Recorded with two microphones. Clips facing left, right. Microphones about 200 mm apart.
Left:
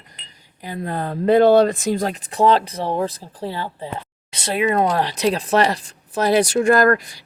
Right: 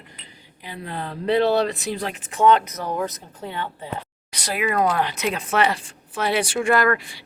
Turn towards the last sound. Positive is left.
turn(degrees=40)  # may be behind; listen again after turning